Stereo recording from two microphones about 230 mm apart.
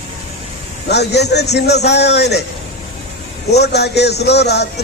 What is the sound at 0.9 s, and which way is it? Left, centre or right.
A man's voice, left.